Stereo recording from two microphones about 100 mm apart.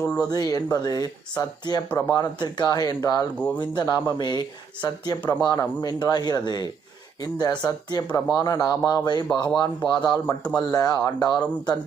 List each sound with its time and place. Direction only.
0.2 s speech: 40° left (ahead or behind)
3.3 s speech: 15° left (ahead or behind)
3.8 s speech: 45° left (ahead or behind)
10.2 s speech: 10° left (ahead or behind)
10.7 s speech: 40° left (ahead or behind)